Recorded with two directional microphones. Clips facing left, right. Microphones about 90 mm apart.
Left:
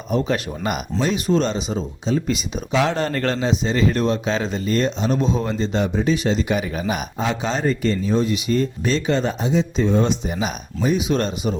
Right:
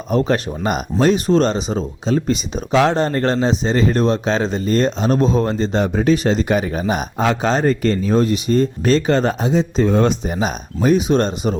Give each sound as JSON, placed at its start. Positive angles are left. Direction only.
{"t": 0.1, "sound": "speech", "side_deg": -40}
{"t": 0.9, "sound": "speech", "side_deg": -45}
{"t": 2.9, "sound": "speech", "side_deg": -25}
{"t": 7.2, "sound": "speech", "side_deg": -50}
{"t": 11.1, "sound": "speech", "side_deg": -35}